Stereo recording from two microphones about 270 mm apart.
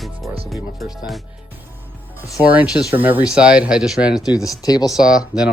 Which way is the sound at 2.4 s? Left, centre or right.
Centre.